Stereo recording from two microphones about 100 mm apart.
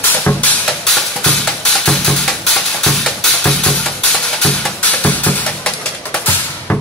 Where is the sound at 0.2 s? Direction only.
15° left (ahead or behind).